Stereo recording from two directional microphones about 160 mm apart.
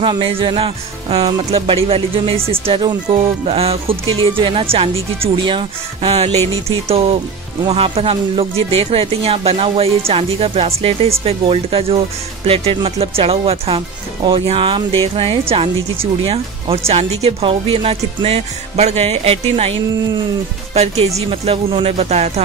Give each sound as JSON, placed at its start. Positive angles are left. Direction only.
{"t": 0.0, "sound": "speech", "side_deg": -30}
{"t": 7.7, "sound": "speech", "side_deg": -40}